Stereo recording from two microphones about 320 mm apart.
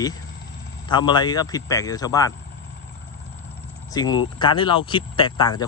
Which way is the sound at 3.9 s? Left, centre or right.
Centre.